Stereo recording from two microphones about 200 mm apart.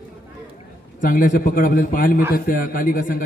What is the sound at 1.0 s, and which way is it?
A man's voice, 40° left (ahead or behind).